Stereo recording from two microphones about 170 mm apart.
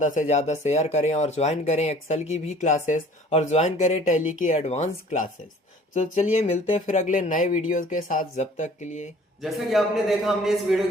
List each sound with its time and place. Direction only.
0.0 s speech: 50° left (ahead or behind)
6.3 s speech: 40° left (ahead or behind)
9.4 s a man's voice: centre (ahead or behind)